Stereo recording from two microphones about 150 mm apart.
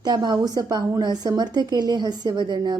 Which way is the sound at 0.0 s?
30° right (ahead or behind).